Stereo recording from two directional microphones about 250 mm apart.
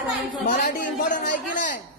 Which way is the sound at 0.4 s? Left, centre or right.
Left.